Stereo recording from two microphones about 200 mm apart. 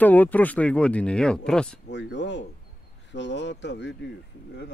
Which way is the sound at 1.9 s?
65° left (ahead or behind).